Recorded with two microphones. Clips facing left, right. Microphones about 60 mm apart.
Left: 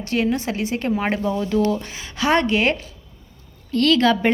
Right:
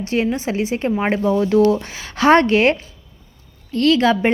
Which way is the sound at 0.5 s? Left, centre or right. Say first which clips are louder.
Right 3 dB; centre.